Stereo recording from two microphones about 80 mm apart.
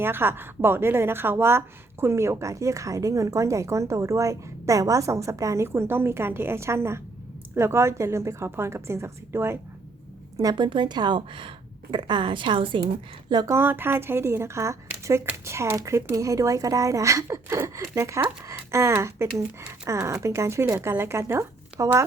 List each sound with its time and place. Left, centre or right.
0.0 s a woman's voice: right
10.5 s speech: right
13.5 s a woman's voice: right